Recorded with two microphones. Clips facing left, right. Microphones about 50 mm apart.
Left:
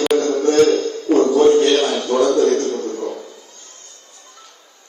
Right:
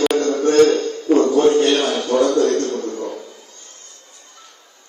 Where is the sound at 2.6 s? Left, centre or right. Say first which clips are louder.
Left 1 dB; right.